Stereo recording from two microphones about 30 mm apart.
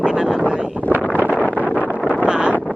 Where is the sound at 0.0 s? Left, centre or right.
Right.